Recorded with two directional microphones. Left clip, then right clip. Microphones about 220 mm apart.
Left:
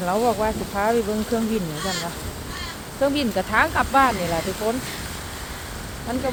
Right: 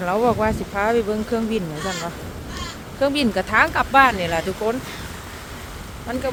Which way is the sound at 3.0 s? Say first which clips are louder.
Right 2 dB; 15° right (ahead or behind).